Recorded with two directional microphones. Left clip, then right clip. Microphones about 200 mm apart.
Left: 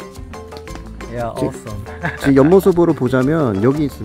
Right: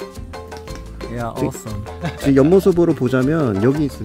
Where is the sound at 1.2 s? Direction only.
55° right (ahead or behind).